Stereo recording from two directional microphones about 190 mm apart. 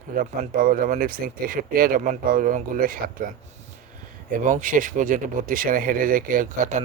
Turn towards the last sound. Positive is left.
turn(degrees=-40)  # may be behind; listen again after turning